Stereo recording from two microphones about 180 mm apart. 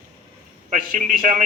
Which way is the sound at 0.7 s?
45° right (ahead or behind).